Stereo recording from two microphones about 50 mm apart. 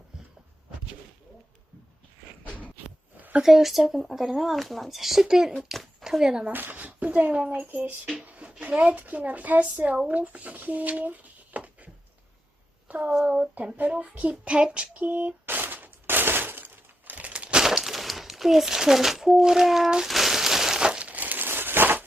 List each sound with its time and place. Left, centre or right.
2.4 s a sound: left
3.4 s speech: centre
6.5 s a sound: right
8.6 s a woman's voice: right
12.9 s speech: right
13.2 s child singing: right
17.6 s speech: centre
20.1 s a sound: centre
21.0 s crumpling: right